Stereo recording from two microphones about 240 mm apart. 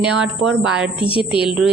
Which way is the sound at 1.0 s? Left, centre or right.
Left.